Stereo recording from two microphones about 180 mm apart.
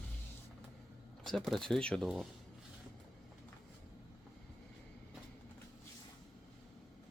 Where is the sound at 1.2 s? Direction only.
5° left (ahead or behind).